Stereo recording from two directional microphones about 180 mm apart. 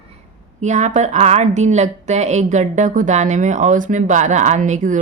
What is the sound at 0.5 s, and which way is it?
A woman's voice, 40° right (ahead or behind).